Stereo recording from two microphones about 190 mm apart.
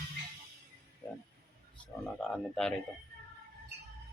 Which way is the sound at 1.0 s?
15° left (ahead or behind).